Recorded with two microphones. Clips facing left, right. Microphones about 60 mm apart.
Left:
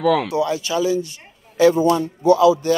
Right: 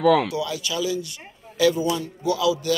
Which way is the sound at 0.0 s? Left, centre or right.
Centre.